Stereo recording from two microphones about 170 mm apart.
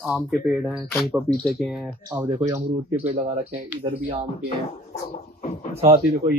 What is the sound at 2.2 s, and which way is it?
Speech, 25° right (ahead or behind).